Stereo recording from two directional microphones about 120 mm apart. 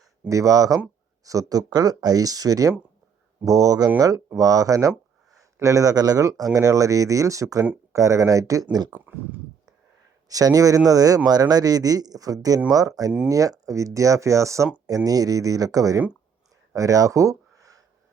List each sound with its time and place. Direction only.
0.3 s speech: 30° right (ahead or behind)
9.0 s speech: 15° right (ahead or behind)
10.2 s speech: 30° right (ahead or behind)